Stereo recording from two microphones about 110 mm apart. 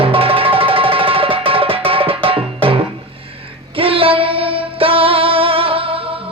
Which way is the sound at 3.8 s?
55° right (ahead or behind).